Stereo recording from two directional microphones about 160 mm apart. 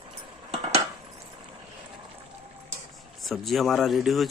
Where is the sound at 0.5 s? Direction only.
40° right (ahead or behind).